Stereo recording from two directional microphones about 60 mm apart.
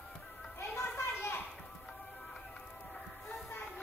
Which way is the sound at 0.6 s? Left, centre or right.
Left.